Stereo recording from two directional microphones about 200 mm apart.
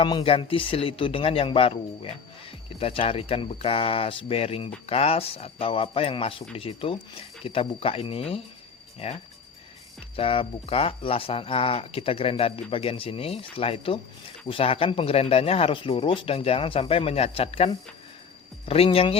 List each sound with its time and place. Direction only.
0.0 s speech: 25° left (ahead or behind)